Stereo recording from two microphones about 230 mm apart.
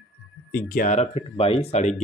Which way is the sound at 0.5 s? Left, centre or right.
Left.